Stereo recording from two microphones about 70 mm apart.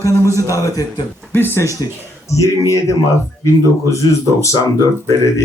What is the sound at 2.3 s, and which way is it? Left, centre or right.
A man's voice, left.